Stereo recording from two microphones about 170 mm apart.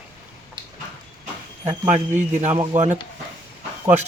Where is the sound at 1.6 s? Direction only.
25° right (ahead or behind).